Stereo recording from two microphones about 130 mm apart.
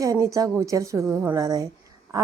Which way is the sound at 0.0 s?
25° right (ahead or behind).